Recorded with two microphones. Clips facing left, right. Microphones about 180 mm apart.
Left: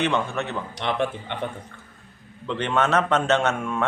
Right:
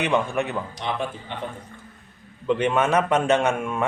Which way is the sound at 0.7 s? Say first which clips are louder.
Left 3 dB; 65° left (ahead or behind).